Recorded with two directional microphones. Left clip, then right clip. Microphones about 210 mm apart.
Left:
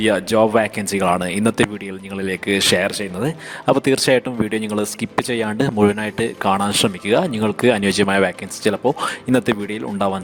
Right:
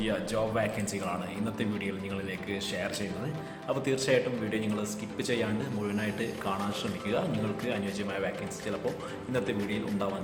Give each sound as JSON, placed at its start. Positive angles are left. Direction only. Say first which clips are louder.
{"t": 0.0, "sound": "speech", "louder": "left 15 dB", "side_deg": 50}